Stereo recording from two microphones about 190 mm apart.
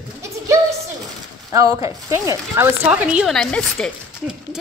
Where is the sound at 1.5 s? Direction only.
15° right (ahead or behind).